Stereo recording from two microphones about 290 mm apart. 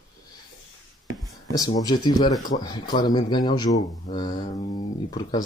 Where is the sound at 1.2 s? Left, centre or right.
Centre.